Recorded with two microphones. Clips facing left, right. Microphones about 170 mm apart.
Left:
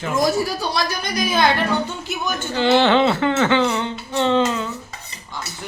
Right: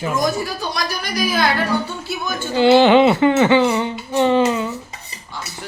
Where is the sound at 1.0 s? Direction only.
20° left (ahead or behind).